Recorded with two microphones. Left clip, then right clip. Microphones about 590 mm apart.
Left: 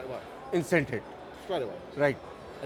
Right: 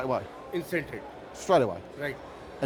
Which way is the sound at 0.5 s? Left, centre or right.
Left.